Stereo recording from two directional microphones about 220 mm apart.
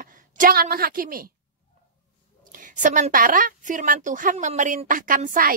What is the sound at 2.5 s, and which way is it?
A woman's voice, 35° right (ahead or behind).